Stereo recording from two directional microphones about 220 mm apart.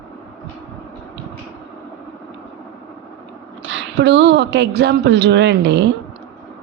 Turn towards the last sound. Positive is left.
turn(degrees=-50)  # may be behind; listen again after turning